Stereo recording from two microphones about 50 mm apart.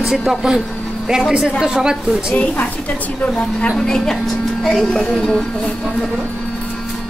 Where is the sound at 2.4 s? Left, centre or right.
Left.